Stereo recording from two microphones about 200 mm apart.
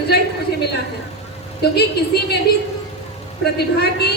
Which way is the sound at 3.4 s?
55° left (ahead or behind).